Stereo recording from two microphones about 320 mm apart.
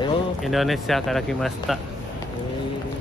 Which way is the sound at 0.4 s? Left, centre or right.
Centre.